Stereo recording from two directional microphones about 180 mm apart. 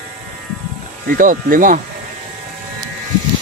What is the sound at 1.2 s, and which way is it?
Speech, 50° right (ahead or behind).